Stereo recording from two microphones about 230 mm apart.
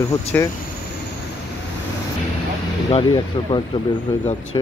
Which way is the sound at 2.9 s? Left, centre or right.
Left.